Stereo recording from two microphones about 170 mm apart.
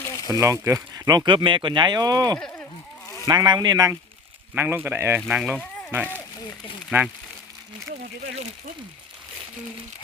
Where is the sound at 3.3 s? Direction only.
25° right (ahead or behind); by 5.6 s 5° right (ahead or behind).